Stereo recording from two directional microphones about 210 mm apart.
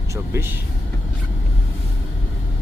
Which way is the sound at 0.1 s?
10° right (ahead or behind).